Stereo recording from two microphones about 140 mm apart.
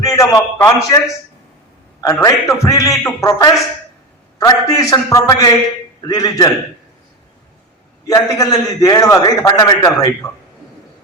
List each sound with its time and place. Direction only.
0.0 s a man's voice: 20° left (ahead or behind)
2.2 s a man's voice: 25° left (ahead or behind)
8.0 s a man's voice: 25° left (ahead or behind)